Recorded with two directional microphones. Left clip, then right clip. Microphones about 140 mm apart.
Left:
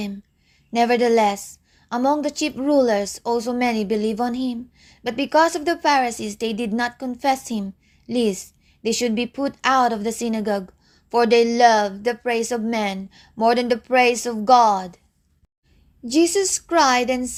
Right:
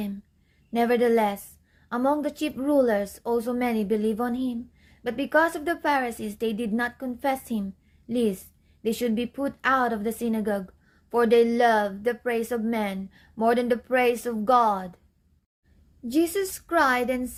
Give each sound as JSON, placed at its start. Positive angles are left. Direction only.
{"t": 0.7, "sound": "a woman's voice", "side_deg": 35}
{"t": 16.0, "sound": "a woman's voice", "side_deg": 35}